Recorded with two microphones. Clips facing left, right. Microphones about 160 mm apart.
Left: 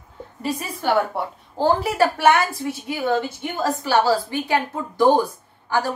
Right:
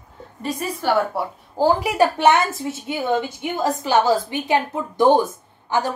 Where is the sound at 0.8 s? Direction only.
Centre (ahead or behind).